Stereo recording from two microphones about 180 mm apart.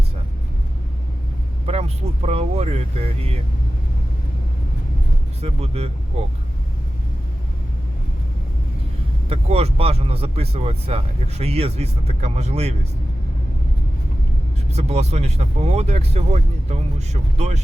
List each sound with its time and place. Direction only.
1.6 s speech: 35° right (ahead or behind)
5.4 s speech: 35° right (ahead or behind)
9.3 s speech: 35° right (ahead or behind)
14.7 s speech: 35° right (ahead or behind)